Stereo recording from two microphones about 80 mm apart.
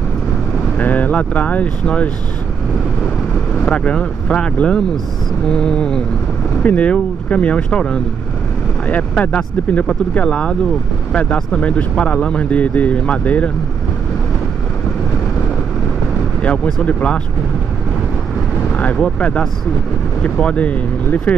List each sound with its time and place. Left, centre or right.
0.7 s speech: left
3.6 s speech: centre
16.4 s speech: centre
18.9 s speech: centre